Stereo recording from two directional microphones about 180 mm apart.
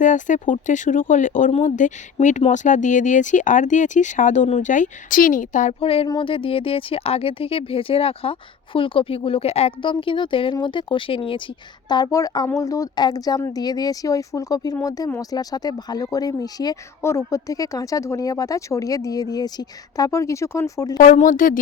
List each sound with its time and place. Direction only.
0.0 s speech: 45° left (ahead or behind); by 21.0 s 20° left (ahead or behind)
21.0 s speech: 50° left (ahead or behind)